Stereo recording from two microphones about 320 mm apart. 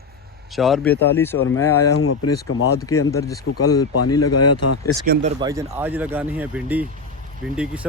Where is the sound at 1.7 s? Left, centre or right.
Left.